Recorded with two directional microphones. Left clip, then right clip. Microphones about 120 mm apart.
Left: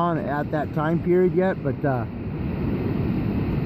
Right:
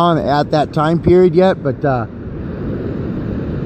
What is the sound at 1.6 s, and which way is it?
Speech, 45° right (ahead or behind).